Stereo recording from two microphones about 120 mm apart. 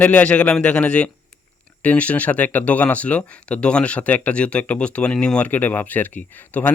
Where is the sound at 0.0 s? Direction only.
15° left (ahead or behind).